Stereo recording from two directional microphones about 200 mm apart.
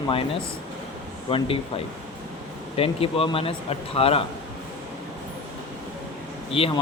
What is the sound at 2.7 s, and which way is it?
Speech, 30° left (ahead or behind).